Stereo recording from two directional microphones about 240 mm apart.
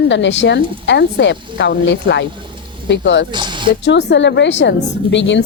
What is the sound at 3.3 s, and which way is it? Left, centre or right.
Speech, centre.